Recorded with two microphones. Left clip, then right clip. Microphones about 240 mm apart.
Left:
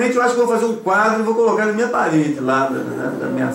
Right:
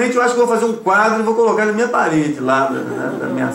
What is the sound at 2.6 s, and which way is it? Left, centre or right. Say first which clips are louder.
Speech: right 2 dB; centre.